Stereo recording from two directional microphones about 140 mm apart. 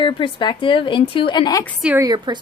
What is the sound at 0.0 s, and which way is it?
A woman's voice, 35° left (ahead or behind).